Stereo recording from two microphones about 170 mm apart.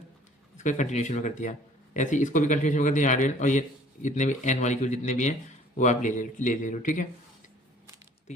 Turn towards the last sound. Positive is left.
turn(degrees=50)  # may be behind; listen again after turning